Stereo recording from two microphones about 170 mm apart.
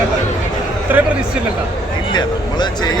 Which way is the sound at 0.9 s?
10° right (ahead or behind).